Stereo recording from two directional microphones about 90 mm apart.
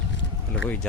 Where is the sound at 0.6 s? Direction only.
15° left (ahead or behind).